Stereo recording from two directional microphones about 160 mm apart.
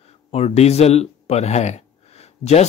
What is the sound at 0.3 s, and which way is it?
Speech, 40° left (ahead or behind).